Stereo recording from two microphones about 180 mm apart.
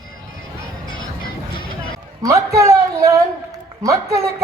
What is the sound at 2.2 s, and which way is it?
A man's voice, 15° right (ahead or behind).